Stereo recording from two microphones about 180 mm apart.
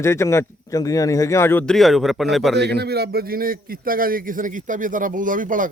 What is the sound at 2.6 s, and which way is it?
A man's voice, 65° right (ahead or behind).